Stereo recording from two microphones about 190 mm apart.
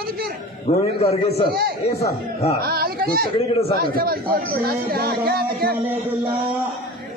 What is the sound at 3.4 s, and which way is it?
Speech, 35° left (ahead or behind).